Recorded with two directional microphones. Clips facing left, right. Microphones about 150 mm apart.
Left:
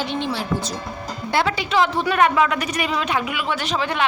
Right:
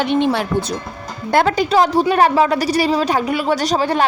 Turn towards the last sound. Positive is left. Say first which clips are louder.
# right 7 dB
turn(degrees=-40)  # may be behind; listen again after turning